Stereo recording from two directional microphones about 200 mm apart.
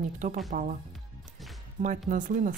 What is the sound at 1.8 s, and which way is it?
Speech, 40° right (ahead or behind).